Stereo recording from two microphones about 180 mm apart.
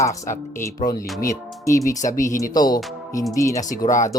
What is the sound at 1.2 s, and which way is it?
Speech, 15° left (ahead or behind).